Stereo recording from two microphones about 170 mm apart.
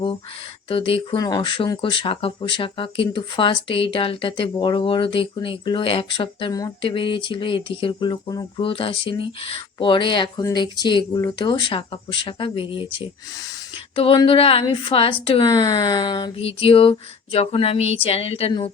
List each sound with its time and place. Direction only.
0.7 s speech: 35° left (ahead or behind)